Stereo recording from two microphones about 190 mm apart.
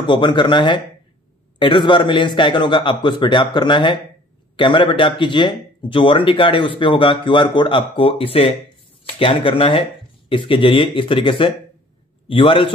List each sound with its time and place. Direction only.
0.0 s a man's voice: 25° left (ahead or behind)